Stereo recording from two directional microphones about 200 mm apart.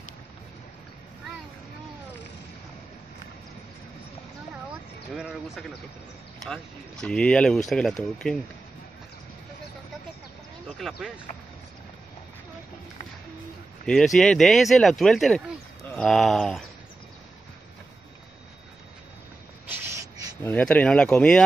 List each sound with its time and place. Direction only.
5.1 s a sound: centre (ahead or behind)
6.4 s speech: 5° left (ahead or behind)
10.8 s speech: centre (ahead or behind)
13.8 s speech: centre (ahead or behind)
19.7 s a sound: 15° right (ahead or behind)
20.4 s speech: 10° left (ahead or behind)